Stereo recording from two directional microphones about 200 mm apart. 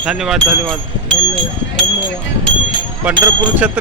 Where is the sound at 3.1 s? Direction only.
20° right (ahead or behind).